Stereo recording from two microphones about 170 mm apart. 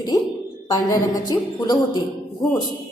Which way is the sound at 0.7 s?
20° left (ahead or behind).